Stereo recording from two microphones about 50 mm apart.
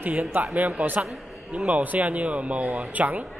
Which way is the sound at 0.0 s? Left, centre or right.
Right.